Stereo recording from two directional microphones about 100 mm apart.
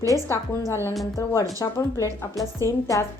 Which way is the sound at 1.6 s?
35° left (ahead or behind).